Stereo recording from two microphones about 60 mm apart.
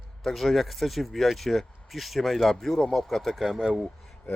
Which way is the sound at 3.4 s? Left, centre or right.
Centre.